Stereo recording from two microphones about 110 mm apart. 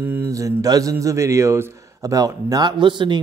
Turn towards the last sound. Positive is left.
turn(degrees=-45)  # may be behind; listen again after turning